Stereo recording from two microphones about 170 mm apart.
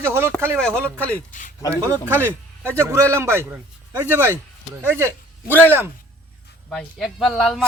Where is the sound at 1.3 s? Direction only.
50° left (ahead or behind).